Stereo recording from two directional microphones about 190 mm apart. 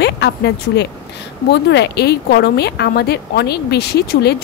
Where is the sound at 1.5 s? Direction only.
65° left (ahead or behind).